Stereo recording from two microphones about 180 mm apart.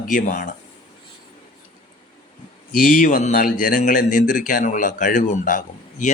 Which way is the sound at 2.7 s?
50° left (ahead or behind).